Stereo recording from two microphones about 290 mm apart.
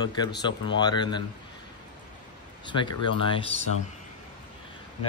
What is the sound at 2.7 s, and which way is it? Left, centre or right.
Speech, centre.